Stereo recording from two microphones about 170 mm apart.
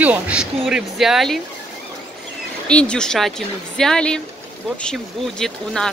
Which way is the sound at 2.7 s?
5° left (ahead or behind).